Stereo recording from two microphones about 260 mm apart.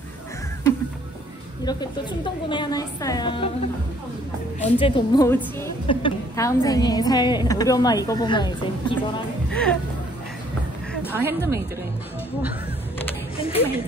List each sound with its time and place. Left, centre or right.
1.6 s a woman's voice: centre
4.6 s a woman's voice: left
9.5 s speech: centre
11.1 s speech: centre
13.4 s speech: left